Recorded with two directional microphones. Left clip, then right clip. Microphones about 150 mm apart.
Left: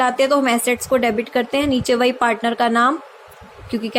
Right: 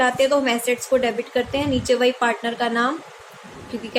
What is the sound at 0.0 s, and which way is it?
Speech, 45° left (ahead or behind).